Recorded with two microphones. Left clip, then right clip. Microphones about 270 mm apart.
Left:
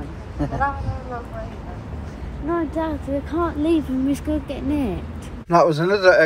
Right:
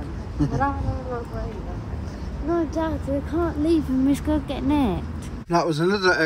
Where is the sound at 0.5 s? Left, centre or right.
Right.